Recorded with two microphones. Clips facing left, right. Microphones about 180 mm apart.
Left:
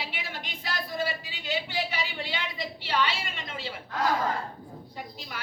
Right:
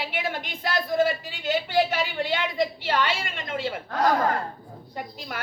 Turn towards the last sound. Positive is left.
turn(degrees=-50)  # may be behind; listen again after turning